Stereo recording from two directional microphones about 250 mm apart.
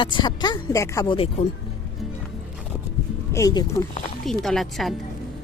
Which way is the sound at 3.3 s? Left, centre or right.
Centre.